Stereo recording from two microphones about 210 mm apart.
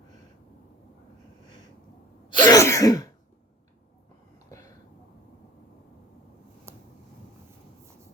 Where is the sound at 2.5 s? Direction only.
15° left (ahead or behind).